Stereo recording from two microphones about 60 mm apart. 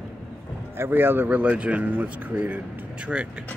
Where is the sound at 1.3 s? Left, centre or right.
Right.